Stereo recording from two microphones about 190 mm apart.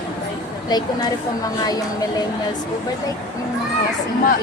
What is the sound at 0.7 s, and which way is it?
Speech, 20° left (ahead or behind).